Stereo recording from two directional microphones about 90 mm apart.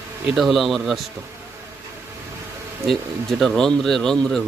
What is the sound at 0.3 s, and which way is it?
Speech, centre (ahead or behind).